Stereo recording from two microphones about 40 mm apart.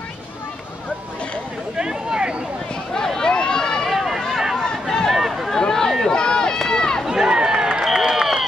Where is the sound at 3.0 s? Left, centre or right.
Centre.